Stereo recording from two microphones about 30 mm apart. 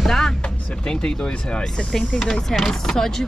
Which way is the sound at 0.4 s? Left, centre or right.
Left.